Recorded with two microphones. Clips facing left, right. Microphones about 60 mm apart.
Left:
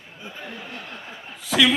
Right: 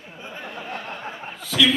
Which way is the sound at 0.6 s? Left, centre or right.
Right.